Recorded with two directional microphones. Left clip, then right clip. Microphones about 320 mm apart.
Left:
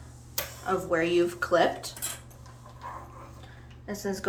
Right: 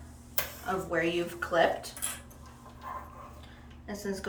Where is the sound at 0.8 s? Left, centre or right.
Centre.